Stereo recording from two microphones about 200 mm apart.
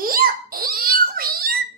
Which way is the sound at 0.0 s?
45° right (ahead or behind).